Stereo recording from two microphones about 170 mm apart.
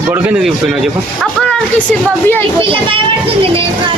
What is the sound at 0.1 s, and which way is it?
Speech, 5° right (ahead or behind).